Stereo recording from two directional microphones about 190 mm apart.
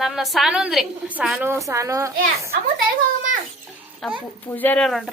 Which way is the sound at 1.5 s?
15° right (ahead or behind).